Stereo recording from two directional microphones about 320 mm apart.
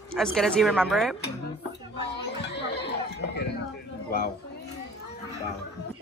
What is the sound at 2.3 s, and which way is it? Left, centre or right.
Chatter, left.